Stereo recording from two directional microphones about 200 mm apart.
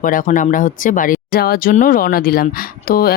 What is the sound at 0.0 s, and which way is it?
Speech, 40° left (ahead or behind).